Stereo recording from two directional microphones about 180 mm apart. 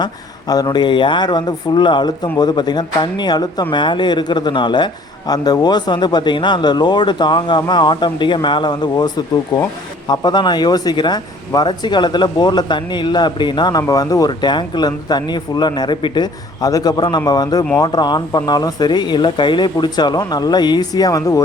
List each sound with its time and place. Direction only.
0.0 s speech: 20° left (ahead or behind)